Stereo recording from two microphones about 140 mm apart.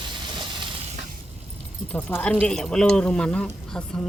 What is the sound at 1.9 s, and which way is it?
Speech, 10° left (ahead or behind).